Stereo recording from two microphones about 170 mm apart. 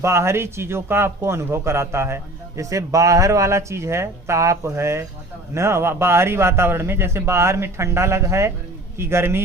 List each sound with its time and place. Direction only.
0.0 s speech: 15° right (ahead or behind)